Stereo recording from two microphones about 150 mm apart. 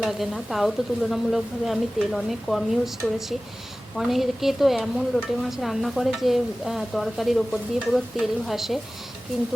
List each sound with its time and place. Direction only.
0.0 s stir: centre (ahead or behind)